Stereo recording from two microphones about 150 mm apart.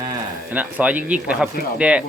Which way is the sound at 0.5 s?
10° right (ahead or behind).